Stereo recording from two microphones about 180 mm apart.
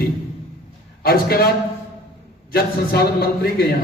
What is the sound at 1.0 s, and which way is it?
Speech, 60° left (ahead or behind).